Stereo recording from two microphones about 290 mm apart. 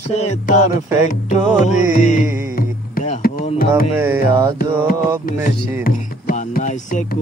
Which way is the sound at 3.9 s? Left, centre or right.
Centre.